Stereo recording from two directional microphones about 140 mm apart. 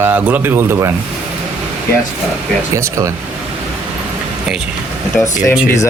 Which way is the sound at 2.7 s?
20° right (ahead or behind).